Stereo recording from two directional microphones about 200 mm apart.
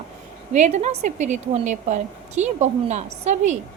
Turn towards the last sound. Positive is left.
turn(degrees=-35)  # may be behind; listen again after turning